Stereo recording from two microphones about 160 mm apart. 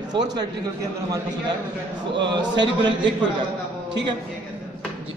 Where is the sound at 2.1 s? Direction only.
90° right.